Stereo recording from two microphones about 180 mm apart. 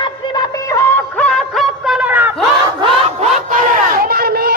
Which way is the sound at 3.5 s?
55° right (ahead or behind).